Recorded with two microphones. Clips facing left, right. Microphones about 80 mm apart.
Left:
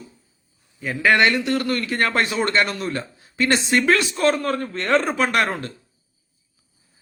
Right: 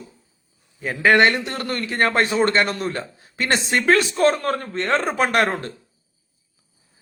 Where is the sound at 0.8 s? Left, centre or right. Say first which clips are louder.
Right 2 dB; right.